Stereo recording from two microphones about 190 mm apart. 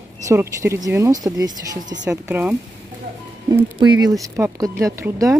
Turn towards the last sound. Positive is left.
turn(degrees=-15)  # may be behind; listen again after turning